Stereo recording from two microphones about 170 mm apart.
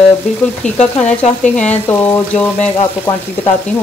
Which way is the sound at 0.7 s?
40° left (ahead or behind).